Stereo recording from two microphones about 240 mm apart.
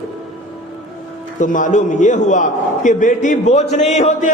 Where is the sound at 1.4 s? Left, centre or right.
Left.